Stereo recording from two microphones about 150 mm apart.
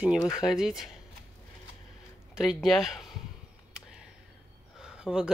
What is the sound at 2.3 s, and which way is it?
Speech, centre (ahead or behind).